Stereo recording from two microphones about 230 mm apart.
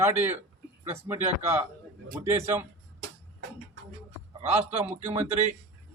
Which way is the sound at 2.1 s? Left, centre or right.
Centre.